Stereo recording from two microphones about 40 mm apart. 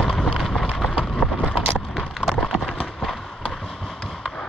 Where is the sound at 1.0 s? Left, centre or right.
Centre.